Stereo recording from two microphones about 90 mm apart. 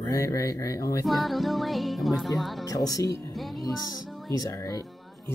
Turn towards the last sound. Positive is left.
turn(degrees=0)  # may be behind; listen again after turning